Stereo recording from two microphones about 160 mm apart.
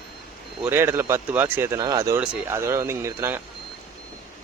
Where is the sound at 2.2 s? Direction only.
5° right (ahead or behind).